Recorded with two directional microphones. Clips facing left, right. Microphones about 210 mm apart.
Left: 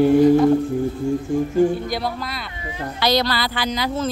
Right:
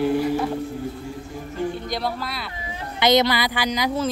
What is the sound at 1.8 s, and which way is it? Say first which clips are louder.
Speech: left 2 dB; centre (ahead or behind).